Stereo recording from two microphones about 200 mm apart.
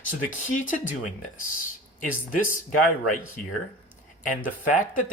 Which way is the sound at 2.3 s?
40° left (ahead or behind).